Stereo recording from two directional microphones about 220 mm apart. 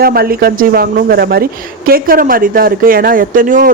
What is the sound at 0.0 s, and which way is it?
A woman's voice, 40° right (ahead or behind).